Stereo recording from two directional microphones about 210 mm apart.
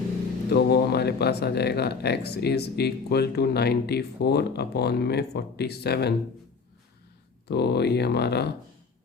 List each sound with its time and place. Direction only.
0.5 s speech: 50° left (ahead or behind)
7.4 s speech: 50° left (ahead or behind)